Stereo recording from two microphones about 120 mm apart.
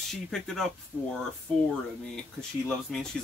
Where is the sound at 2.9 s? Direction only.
5° left (ahead or behind).